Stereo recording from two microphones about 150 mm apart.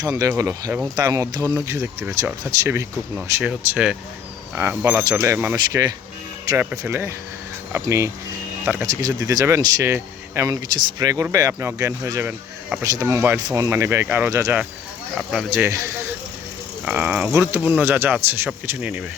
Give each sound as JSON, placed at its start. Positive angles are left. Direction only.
{"t": 0.0, "sound": "speech", "side_deg": -25}
{"t": 3.4, "sound": "speech", "side_deg": -5}
{"t": 5.5, "sound": "speech", "side_deg": -25}
{"t": 6.6, "sound": "speech", "side_deg": -15}